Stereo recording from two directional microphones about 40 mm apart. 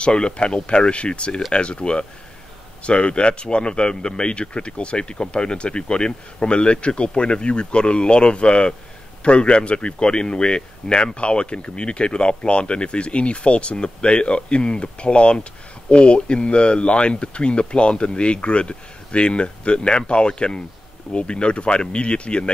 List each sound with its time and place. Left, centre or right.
0.0 s a man's voice: left